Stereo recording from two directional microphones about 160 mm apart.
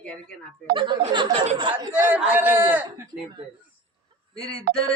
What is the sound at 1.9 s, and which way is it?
Speech, 10° right (ahead or behind).